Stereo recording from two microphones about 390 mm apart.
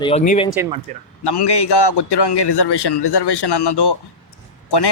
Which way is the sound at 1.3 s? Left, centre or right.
Left.